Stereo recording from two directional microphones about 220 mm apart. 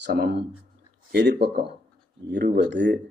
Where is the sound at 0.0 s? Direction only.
45° right (ahead or behind).